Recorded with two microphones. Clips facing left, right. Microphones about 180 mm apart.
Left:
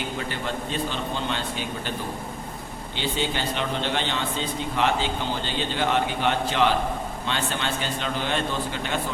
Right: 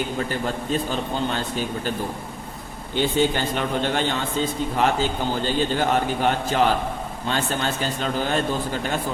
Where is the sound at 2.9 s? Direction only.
45° right (ahead or behind).